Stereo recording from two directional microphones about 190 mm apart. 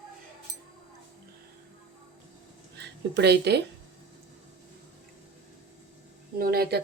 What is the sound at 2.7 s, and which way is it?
Speech, 60° right (ahead or behind).